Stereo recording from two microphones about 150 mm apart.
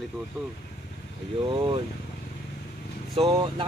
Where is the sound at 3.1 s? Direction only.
40° right (ahead or behind).